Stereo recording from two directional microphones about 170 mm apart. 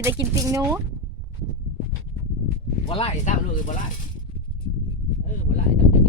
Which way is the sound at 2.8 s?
35° left (ahead or behind).